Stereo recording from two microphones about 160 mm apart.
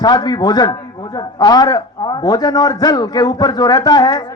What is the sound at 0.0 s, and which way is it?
A man's voice, 25° left (ahead or behind).